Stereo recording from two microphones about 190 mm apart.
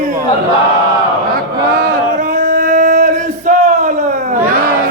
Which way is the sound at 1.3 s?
50° right (ahead or behind).